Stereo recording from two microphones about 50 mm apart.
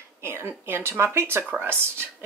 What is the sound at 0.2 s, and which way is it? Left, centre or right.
Speech, right.